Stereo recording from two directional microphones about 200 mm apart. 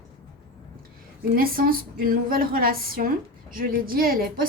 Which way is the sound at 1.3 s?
45° right (ahead or behind).